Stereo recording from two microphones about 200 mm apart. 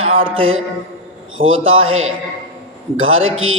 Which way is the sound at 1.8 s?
90° right.